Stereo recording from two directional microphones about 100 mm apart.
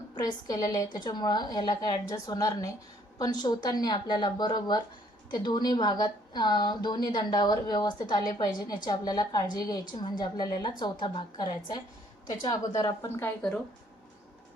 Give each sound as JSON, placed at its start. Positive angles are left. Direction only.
{"t": 0.1, "sound": "a woman's voice", "side_deg": 45}